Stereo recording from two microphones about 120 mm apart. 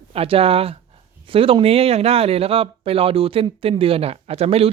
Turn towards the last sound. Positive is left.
turn(degrees=-55)  # may be behind; listen again after turning